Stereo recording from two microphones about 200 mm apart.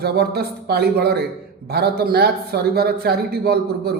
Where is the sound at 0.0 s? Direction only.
50° right (ahead or behind).